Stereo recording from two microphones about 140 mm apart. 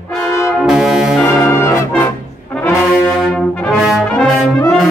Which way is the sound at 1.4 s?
20° left (ahead or behind).